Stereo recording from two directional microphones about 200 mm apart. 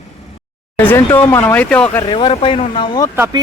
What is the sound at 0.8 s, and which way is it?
Speech, 10° left (ahead or behind).